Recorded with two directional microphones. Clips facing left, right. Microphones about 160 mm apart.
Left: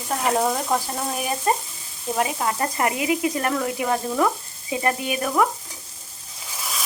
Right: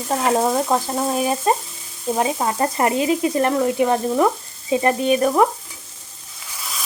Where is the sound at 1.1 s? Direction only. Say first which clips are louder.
Right 3 dB; 25° right (ahead or behind).